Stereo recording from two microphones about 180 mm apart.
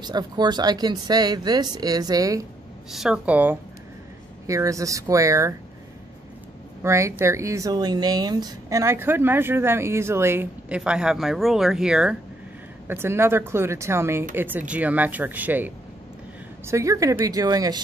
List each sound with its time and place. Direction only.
0.0 s speech: 25° right (ahead or behind)
2.9 s speech: 5° right (ahead or behind)
6.8 s speech: 15° right (ahead or behind)